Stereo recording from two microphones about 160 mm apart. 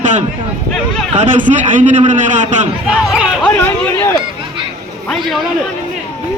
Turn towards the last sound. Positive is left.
turn(degrees=0)  # may be behind; listen again after turning